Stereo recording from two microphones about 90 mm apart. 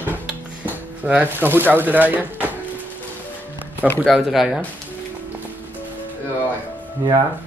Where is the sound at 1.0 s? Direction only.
15° right (ahead or behind).